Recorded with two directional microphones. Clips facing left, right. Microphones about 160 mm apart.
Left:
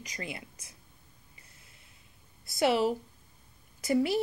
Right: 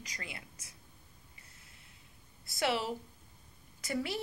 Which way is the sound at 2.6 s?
20° left (ahead or behind).